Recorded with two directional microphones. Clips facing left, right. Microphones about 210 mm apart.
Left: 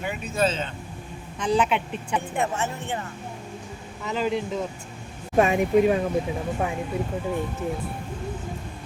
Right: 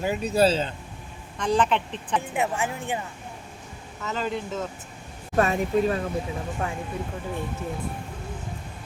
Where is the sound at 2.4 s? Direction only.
10° right (ahead or behind).